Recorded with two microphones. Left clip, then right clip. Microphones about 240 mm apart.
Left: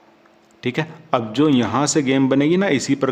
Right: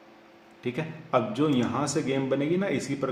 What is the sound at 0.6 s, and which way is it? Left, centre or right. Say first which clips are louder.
A man's voice: left 9 dB; left.